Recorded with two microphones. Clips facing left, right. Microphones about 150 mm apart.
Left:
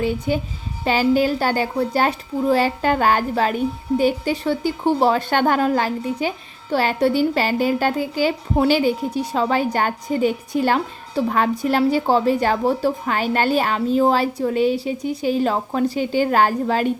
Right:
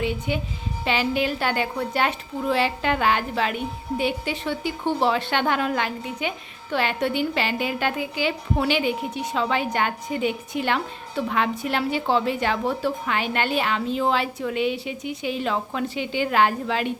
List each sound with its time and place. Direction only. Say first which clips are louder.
0.0 s a woman's voice: left 5 dB; 40° left (ahead or behind)